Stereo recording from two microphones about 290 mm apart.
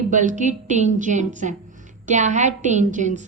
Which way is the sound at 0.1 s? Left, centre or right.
Right.